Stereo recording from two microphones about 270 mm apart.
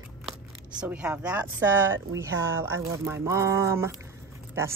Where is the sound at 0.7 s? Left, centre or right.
Centre.